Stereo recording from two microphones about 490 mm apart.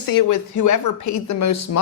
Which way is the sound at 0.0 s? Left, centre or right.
Left.